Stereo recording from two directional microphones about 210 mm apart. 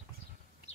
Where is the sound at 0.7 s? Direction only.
30° left (ahead or behind).